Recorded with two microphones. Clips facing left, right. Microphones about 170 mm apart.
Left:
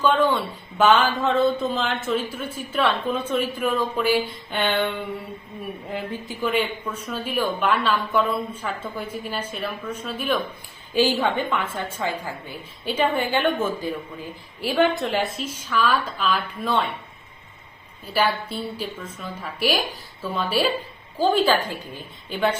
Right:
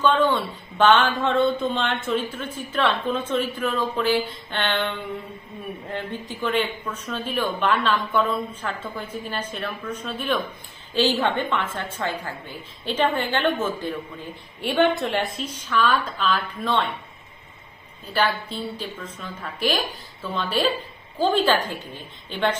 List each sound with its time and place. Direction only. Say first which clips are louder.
0.0 s a woman's voice: even; 10° left (ahead or behind)
18.1 s a woman's voice: left 1 dB; 10° left (ahead or behind)